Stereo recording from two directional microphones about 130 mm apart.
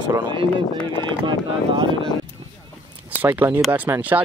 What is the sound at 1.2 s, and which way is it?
Speech, 45° right (ahead or behind).